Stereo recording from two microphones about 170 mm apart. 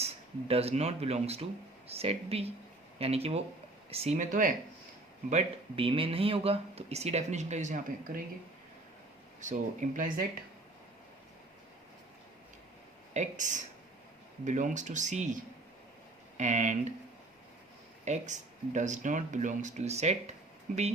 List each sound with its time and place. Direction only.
0.0 s speech: 35° right (ahead or behind)
5.3 s speech: 35° right (ahead or behind)
9.4 s speech: 45° right (ahead or behind)
13.1 s speech: 45° right (ahead or behind)
16.4 s speech: 45° right (ahead or behind)
18.0 s speech: 45° right (ahead or behind)